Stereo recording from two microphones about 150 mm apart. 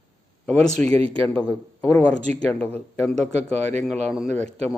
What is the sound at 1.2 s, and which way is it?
Speech, 10° left (ahead or behind).